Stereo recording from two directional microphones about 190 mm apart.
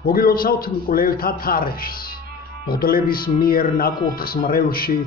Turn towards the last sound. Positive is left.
turn(degrees=50)  # may be behind; listen again after turning